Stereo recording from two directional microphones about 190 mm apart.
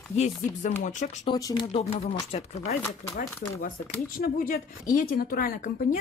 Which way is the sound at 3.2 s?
45° left (ahead or behind).